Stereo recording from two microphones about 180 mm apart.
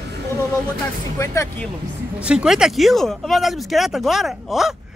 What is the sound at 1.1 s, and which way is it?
Speech, 15° left (ahead or behind).